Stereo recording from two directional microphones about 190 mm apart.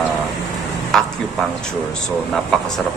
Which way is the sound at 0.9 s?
5° left (ahead or behind).